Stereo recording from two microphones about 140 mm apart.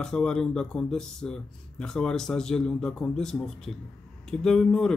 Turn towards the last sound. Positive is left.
turn(degrees=5)  # may be behind; listen again after turning